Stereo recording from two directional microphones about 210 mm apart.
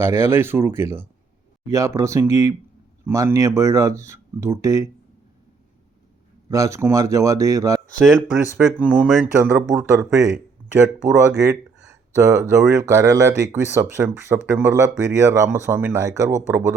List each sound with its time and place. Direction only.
0.0 s speech: 10° right (ahead or behind)
6.5 s speech: 15° right (ahead or behind)
8.0 s speech: centre (ahead or behind)
11.9 s speech: 15° right (ahead or behind)